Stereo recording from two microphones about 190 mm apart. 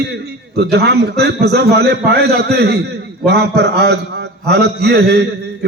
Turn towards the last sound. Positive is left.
turn(degrees=-60)  # may be behind; listen again after turning